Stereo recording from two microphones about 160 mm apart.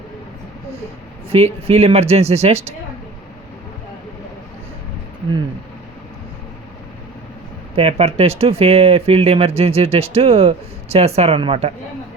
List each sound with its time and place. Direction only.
1.3 s speech: 40° right (ahead or behind)
7.8 s speech: 40° right (ahead or behind)